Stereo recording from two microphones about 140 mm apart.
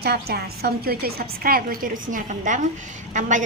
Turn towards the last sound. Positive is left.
turn(degrees=-65)  # may be behind; listen again after turning